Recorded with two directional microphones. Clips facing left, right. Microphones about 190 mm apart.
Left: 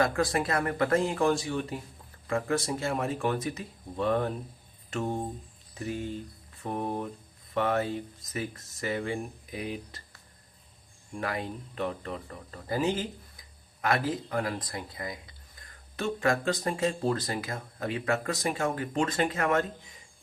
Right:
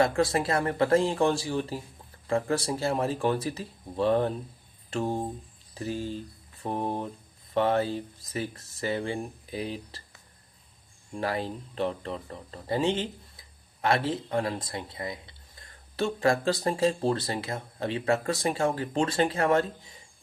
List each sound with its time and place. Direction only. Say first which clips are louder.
0.0 s speech: right 2 dB; 25° right (ahead or behind)
11.2 s speech: right 3 dB; 30° right (ahead or behind)